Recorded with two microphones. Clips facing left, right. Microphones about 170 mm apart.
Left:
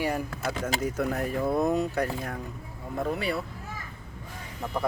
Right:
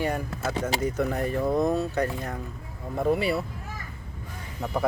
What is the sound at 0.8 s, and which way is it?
Speech, 5° left (ahead or behind).